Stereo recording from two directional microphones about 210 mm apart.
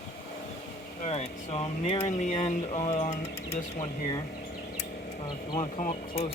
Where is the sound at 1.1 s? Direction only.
30° left (ahead or behind).